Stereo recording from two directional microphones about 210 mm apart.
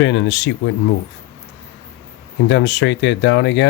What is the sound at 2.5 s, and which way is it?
Speech, 55° left (ahead or behind).